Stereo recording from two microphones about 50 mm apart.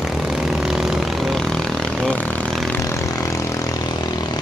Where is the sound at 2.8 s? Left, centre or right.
Left.